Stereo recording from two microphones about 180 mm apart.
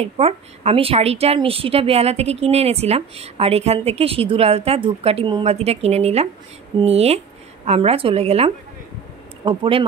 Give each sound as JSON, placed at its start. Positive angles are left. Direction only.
{"t": 0.0, "sound": "a woman's voice", "side_deg": -35}